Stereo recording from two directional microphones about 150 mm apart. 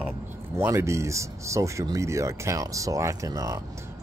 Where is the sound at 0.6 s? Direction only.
20° right (ahead or behind).